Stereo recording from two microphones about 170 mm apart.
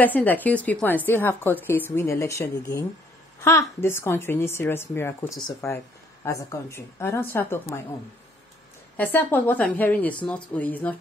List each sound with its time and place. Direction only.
0.0 s a woman's voice: 10° left (ahead or behind)
8.9 s a woman's voice: 10° left (ahead or behind)